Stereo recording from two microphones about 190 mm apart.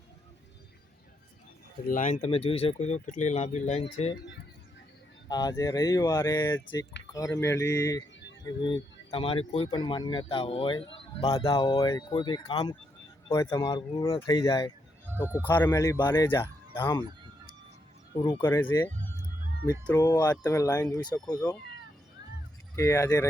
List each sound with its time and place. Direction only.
1.9 s speech: 40° left (ahead or behind)
5.3 s speech: 20° left (ahead or behind)
13.2 s speech: 15° left (ahead or behind)
15.0 s a sound: 10° right (ahead or behind)
15.4 s speech: 10° left (ahead or behind)
18.2 s speech: 25° left (ahead or behind)
20.0 s speech: 20° left (ahead or behind)
22.7 s speech: 15° left (ahead or behind)